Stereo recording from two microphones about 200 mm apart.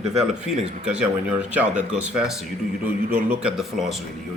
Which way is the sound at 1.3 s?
5° right (ahead or behind).